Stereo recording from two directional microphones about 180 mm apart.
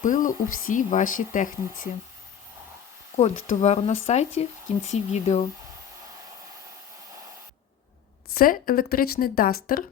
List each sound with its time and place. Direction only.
0.0 s speech: 45° left (ahead or behind)
3.2 s speech: 40° left (ahead or behind)
8.4 s speech: 55° left (ahead or behind)